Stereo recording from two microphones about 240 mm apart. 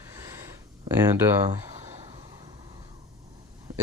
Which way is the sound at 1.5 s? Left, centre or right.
Right.